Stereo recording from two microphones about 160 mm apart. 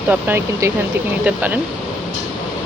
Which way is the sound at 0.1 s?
15° right (ahead or behind).